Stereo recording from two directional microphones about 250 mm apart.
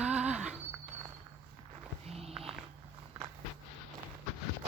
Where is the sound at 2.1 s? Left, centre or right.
Right.